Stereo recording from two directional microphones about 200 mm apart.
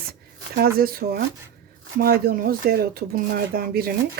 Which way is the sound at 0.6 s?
50° right (ahead or behind).